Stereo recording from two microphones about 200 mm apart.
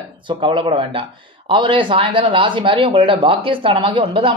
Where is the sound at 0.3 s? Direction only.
25° right (ahead or behind).